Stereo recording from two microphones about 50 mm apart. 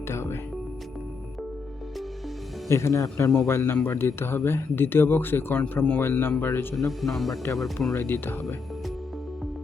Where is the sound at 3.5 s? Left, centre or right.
Left.